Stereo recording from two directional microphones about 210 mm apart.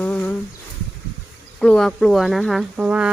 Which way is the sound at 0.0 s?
5° left (ahead or behind).